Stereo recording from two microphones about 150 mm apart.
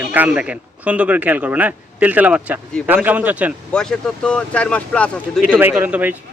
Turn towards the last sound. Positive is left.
turn(degrees=-10)  # may be behind; listen again after turning